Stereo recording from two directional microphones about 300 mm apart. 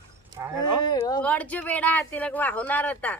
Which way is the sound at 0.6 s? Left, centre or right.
Centre.